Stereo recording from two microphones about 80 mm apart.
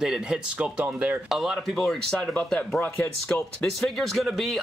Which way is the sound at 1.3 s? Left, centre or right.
Centre.